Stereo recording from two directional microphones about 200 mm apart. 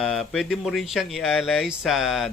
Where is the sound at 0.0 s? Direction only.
Centre (ahead or behind).